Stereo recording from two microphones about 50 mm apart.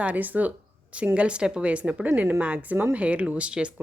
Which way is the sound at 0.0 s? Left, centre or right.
Right.